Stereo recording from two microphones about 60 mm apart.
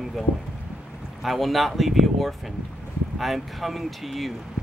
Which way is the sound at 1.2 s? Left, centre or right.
Centre.